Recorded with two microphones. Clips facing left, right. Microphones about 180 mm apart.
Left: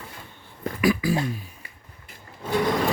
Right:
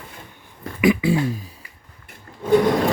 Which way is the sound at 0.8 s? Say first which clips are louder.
Right 5 dB; 20° right (ahead or behind).